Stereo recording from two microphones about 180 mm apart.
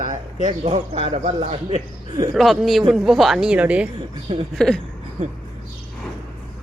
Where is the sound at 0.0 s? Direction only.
45° right (ahead or behind).